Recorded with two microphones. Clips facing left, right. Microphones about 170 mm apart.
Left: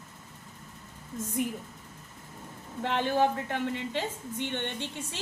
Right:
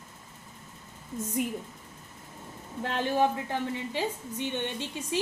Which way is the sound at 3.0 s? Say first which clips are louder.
Right 1 dB; 15° right (ahead or behind).